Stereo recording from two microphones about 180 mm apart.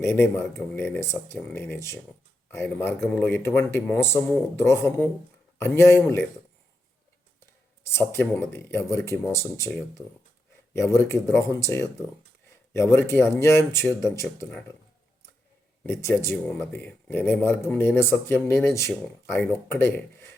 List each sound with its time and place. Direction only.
0.0 s speech: 15° left (ahead or behind)
7.9 s speech: 15° left (ahead or behind)
15.8 s speech: 15° left (ahead or behind)